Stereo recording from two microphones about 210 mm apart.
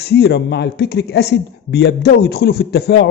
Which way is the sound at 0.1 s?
55° left (ahead or behind).